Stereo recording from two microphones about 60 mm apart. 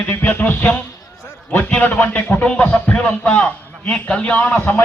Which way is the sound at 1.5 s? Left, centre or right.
Left.